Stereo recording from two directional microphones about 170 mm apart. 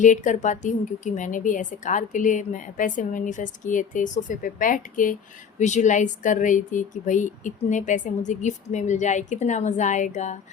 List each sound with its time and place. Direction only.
0.0 s a woman's voice: 45° left (ahead or behind)